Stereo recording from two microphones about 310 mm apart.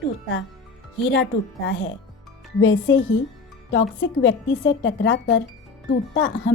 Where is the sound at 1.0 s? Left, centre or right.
Left.